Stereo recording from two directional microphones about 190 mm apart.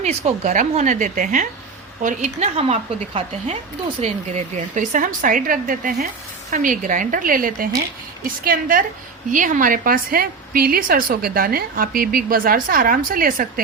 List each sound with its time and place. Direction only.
0.0 s a woman's voice: 35° right (ahead or behind)